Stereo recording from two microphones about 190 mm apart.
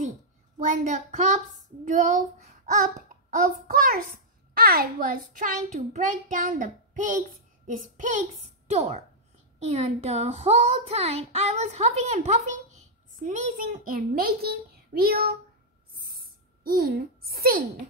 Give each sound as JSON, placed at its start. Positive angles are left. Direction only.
{"t": 0.7, "sound": "a child's voice", "side_deg": -40}
{"t": 16.6, "sound": "a child's voice", "side_deg": -55}